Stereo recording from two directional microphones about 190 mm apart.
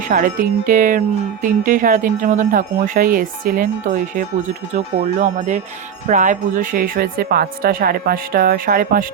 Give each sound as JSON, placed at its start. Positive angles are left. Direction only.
{"t": 0.1, "sound": "speech", "side_deg": -45}
{"t": 6.1, "sound": "speech", "side_deg": -40}